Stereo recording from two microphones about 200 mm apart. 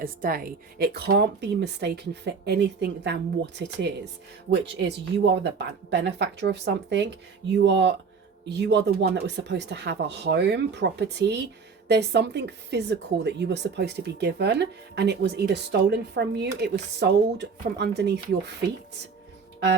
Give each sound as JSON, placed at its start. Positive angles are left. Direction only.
{"t": 0.0, "sound": "a woman's voice", "side_deg": -45}